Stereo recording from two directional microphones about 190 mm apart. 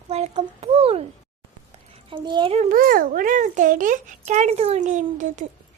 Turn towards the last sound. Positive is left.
turn(degrees=-40)  # may be behind; listen again after turning